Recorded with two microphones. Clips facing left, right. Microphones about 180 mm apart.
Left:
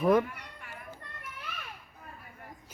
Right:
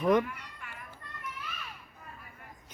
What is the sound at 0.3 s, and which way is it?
Cat, 40° left (ahead or behind).